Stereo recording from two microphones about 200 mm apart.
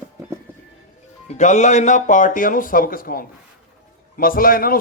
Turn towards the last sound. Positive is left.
turn(degrees=45)  # may be behind; listen again after turning